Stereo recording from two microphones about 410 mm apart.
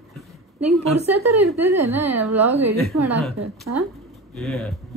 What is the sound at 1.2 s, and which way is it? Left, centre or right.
Speech, right.